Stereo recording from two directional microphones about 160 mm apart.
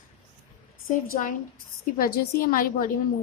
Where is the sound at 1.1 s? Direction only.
55° left (ahead or behind).